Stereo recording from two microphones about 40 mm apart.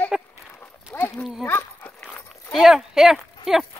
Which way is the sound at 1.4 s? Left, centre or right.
Left.